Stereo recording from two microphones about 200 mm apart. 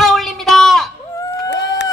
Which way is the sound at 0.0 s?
Centre (ahead or behind).